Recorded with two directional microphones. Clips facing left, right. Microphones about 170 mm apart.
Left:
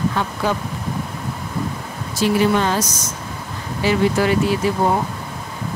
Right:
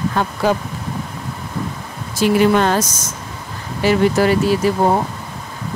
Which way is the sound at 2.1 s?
55° right (ahead or behind).